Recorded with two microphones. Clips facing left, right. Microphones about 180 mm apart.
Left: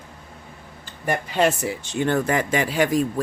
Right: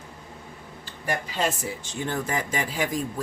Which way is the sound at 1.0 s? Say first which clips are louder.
Left 6 dB; 60° left (ahead or behind).